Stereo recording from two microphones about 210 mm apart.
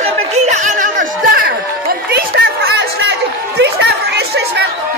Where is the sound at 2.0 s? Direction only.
50° right (ahead or behind).